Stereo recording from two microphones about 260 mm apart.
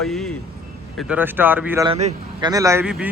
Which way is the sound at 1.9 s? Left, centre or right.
Right.